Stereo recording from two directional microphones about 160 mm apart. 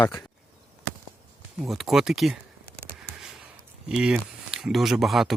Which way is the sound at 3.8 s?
5° right (ahead or behind).